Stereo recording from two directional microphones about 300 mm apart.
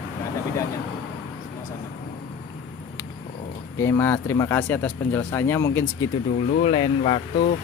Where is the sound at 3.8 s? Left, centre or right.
Centre.